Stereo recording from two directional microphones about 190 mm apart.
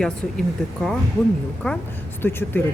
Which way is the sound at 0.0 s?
5° left (ahead or behind).